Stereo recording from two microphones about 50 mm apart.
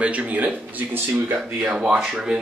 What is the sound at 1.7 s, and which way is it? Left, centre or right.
Speech, centre.